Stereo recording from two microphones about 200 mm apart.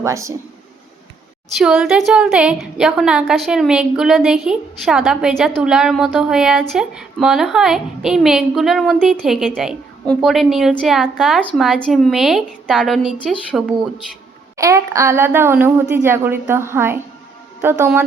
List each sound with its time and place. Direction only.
0.0 s speech: 15° right (ahead or behind)
1.5 s a woman's voice: centre (ahead or behind)
14.6 s speech: 15° right (ahead or behind)